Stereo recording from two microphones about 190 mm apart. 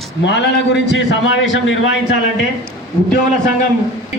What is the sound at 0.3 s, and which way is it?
A man's voice, 65° left (ahead or behind).